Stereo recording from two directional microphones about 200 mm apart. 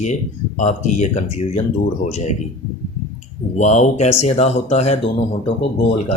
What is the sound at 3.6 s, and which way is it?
Speech, 35° left (ahead or behind).